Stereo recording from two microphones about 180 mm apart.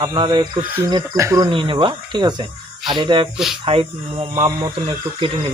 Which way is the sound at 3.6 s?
30° right (ahead or behind).